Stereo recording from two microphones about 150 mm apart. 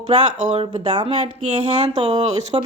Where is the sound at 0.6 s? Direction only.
40° right (ahead or behind).